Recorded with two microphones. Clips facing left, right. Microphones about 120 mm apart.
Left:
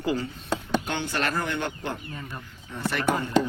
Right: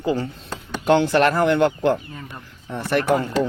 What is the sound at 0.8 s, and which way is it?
Speech, 85° right.